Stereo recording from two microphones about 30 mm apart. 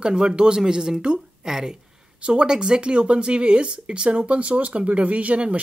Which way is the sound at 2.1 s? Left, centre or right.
Right.